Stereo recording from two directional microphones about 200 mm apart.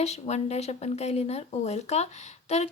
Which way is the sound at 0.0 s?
35° left (ahead or behind).